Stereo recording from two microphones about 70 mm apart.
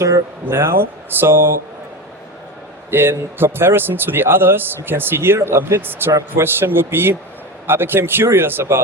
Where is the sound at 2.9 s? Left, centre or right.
Right.